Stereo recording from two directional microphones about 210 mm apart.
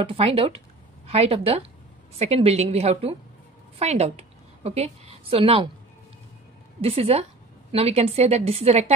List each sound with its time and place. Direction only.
0.0 s a woman's voice: 25° right (ahead or behind)
6.8 s speech: 30° right (ahead or behind)